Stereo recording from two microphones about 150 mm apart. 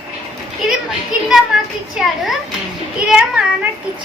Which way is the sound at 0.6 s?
5° right (ahead or behind).